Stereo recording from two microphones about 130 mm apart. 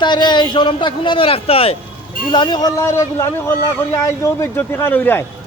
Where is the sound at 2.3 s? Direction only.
35° left (ahead or behind).